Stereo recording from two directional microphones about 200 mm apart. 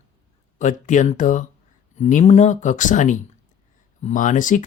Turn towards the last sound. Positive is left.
turn(degrees=40)  # may be behind; listen again after turning